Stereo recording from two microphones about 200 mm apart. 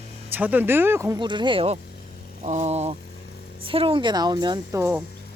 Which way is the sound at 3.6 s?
25° right (ahead or behind).